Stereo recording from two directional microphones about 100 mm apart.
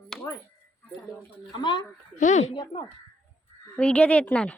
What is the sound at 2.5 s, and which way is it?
Speech, 50° left (ahead or behind).